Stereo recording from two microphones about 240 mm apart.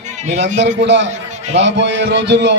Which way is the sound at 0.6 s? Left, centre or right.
Right.